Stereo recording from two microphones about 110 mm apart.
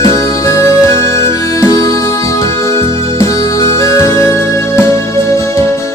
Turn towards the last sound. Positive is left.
turn(degrees=25)  # may be behind; listen again after turning